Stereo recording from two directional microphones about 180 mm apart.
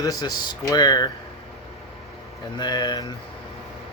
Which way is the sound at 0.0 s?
20° left (ahead or behind).